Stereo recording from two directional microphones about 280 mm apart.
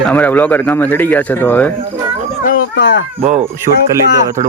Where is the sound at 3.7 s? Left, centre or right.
Right.